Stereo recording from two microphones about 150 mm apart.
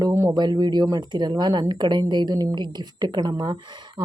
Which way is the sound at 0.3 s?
30° right (ahead or behind).